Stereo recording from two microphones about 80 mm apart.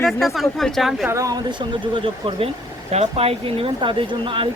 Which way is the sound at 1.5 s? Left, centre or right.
Right.